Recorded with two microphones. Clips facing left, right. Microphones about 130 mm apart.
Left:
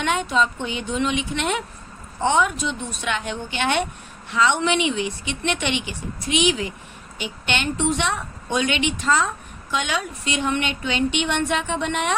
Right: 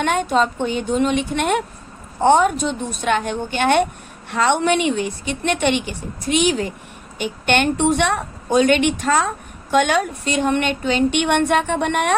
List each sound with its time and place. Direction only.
0.0 s a woman's voice: 50° right (ahead or behind)